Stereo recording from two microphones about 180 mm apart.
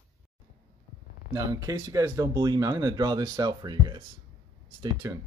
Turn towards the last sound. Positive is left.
turn(degrees=-25)  # may be behind; listen again after turning